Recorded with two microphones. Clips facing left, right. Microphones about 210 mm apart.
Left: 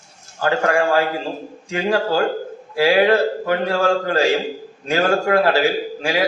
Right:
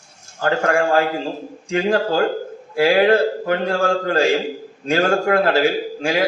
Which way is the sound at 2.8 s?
45° right (ahead or behind).